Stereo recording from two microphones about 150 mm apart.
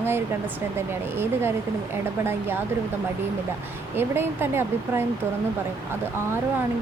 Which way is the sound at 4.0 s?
15° right (ahead or behind).